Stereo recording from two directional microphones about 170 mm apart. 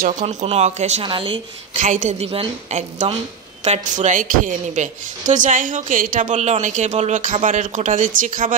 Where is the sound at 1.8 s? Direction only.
45° right (ahead or behind).